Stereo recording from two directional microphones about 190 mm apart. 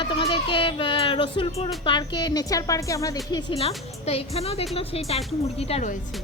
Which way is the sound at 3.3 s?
30° left (ahead or behind).